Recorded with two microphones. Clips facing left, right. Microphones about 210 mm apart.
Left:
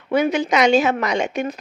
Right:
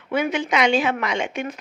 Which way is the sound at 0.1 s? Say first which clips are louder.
Left 4 dB; 40° left (ahead or behind).